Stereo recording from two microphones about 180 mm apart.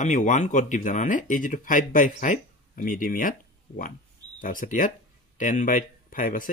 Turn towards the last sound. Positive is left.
turn(degrees=50)  # may be behind; listen again after turning